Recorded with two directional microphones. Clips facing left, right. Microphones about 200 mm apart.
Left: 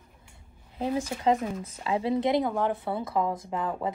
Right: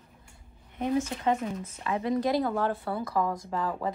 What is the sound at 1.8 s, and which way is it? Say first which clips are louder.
Speech: left 2 dB; 30° left (ahead or behind).